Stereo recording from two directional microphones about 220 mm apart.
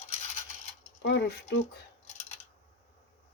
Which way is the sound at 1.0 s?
50° left (ahead or behind).